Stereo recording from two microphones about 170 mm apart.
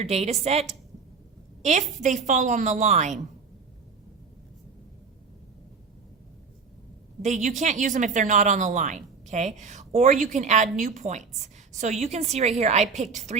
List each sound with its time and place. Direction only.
0.0 s a woman's voice: 40° right (ahead or behind)
1.6 s a woman's voice: 45° right (ahead or behind)
7.2 s a woman's voice: 45° right (ahead or behind)